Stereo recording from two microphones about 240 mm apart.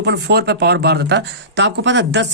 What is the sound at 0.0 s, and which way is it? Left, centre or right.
Speech, right.